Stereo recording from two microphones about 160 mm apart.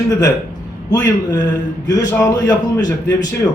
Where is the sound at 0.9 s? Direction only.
20° left (ahead or behind).